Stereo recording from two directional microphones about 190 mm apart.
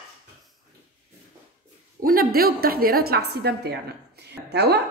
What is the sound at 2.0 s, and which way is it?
A woman's voice, 50° right (ahead or behind).